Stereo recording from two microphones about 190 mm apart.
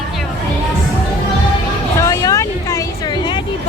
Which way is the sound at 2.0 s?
15° left (ahead or behind).